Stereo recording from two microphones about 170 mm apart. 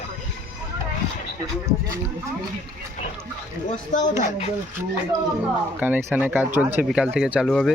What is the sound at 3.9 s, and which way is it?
Speech, 45° left (ahead or behind).